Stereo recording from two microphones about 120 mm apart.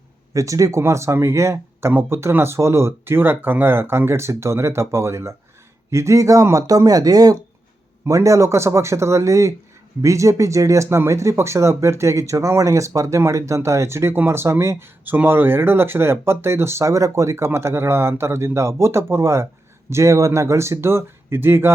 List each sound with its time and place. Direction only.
0.3 s speech: 25° right (ahead or behind)